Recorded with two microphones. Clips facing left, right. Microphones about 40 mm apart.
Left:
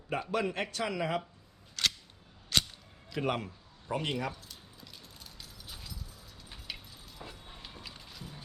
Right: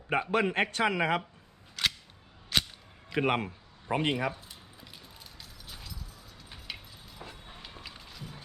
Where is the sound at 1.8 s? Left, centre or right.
Centre.